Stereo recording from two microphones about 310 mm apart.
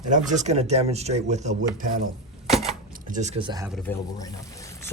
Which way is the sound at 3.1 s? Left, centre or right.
Right.